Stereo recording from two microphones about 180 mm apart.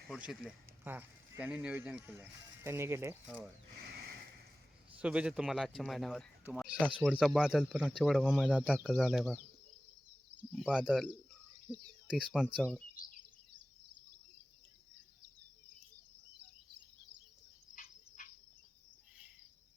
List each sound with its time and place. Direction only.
0.1 s speech: centre (ahead or behind)
3.8 s a sound: 65° right (ahead or behind)
4.9 s speech: 5° right (ahead or behind)
10.5 s speech: 5° right (ahead or behind)